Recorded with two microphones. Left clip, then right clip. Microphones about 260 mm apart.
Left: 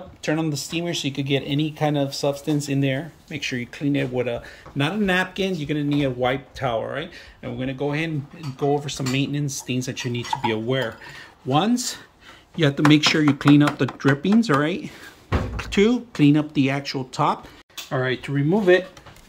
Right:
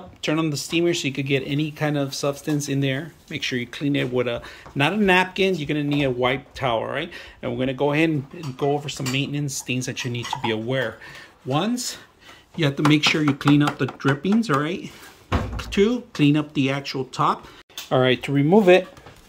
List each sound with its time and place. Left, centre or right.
0.2 s speech: centre
2.0 s speech: right
2.4 s speech: centre
8.5 s speech: centre
17.8 s speech: right